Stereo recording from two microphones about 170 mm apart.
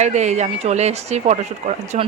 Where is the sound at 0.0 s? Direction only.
40° right (ahead or behind).